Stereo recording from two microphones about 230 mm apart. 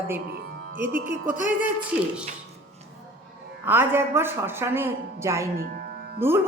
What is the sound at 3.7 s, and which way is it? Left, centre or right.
Speech, centre.